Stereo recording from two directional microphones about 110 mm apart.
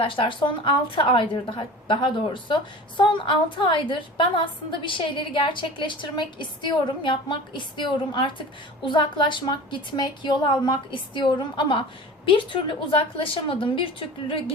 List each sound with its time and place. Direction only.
0.0 s a woman's voice: 50° left (ahead or behind)